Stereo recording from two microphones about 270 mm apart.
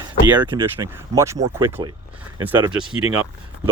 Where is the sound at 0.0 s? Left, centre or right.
Centre.